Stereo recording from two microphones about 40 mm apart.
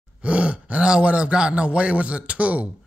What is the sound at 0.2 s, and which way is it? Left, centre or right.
A man's voice, right.